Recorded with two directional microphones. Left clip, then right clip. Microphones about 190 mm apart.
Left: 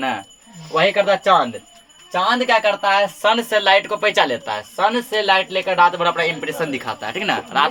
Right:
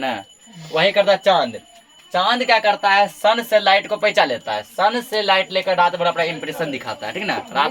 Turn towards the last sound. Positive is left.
turn(degrees=30)  # may be behind; listen again after turning